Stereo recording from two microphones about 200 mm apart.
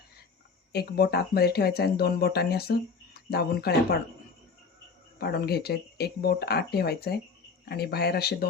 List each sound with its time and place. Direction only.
0.7 s speech: 50° left (ahead or behind)
5.2 s speech: 50° left (ahead or behind)